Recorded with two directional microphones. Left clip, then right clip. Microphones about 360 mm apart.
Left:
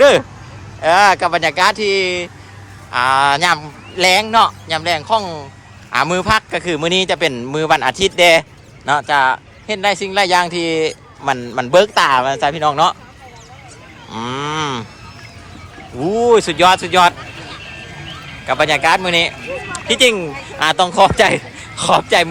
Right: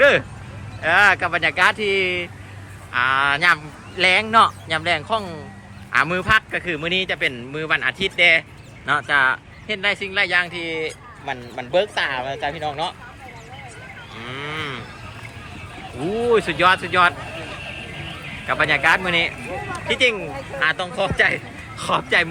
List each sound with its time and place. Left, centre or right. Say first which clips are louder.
0.0 s a man's voice: left 5 dB; centre
11.7 s speech: left 9 dB; left
14.2 s a man's voice: left 9 dB; centre
16.2 s a man's voice: left 6 dB; centre
18.4 s a man's voice: left 4 dB; centre